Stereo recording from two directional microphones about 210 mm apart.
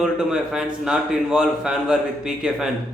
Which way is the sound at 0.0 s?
5° right (ahead or behind).